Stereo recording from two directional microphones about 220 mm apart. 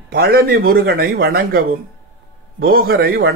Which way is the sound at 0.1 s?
45° right (ahead or behind).